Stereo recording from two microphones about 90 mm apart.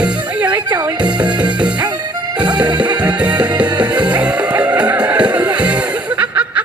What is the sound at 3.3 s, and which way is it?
Music, 50° right (ahead or behind).